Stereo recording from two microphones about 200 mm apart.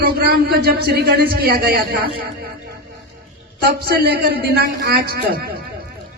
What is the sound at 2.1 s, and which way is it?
Music, 50° right (ahead or behind).